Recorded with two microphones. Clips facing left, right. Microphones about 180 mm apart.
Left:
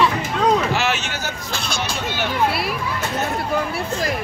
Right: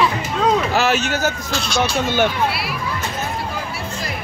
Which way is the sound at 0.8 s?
40° right (ahead or behind).